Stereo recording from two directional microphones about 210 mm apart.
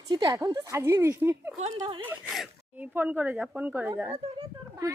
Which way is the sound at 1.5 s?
30° right (ahead or behind).